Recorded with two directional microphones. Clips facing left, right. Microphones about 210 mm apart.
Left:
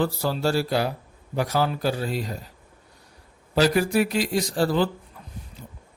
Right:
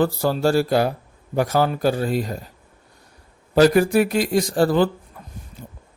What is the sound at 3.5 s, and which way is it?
Speech, 50° right (ahead or behind).